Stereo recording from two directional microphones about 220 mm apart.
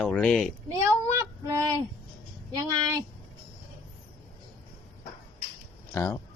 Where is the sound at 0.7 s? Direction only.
15° right (ahead or behind).